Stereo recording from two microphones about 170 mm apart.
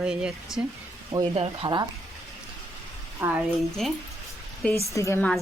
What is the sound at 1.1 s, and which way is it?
Speech, 35° right (ahead or behind).